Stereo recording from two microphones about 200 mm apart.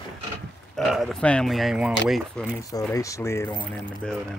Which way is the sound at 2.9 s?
15° left (ahead or behind).